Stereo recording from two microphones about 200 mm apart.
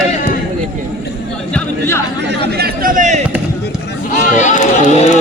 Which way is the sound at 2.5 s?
50° right (ahead or behind).